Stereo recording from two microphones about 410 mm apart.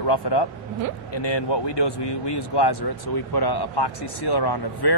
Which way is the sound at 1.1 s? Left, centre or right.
Left.